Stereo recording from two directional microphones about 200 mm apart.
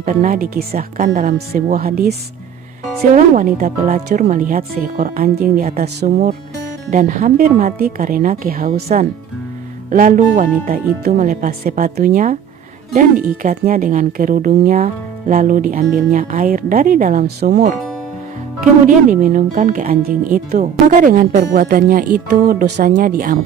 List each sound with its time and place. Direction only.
0.0 s speech: 40° right (ahead or behind)
9.8 s speech: 45° right (ahead or behind)